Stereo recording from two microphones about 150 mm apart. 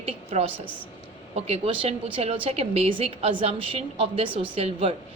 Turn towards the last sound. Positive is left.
turn(degrees=-40)  # may be behind; listen again after turning